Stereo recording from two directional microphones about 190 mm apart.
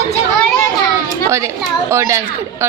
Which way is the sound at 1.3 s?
15° right (ahead or behind).